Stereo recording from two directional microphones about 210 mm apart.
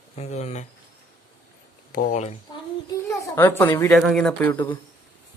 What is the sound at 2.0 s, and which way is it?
Speech, 35° left (ahead or behind).